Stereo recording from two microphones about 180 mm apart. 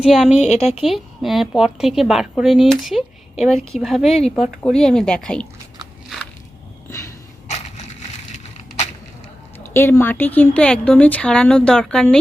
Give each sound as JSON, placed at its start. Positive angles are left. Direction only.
{"t": 0.0, "sound": "speech", "side_deg": -5}
{"t": 0.3, "sound": "a woman's voice", "side_deg": 40}
{"t": 0.8, "sound": "speech", "side_deg": 0}
{"t": 8.5, "sound": "a sound", "side_deg": 40}
{"t": 9.7, "sound": "speech", "side_deg": 10}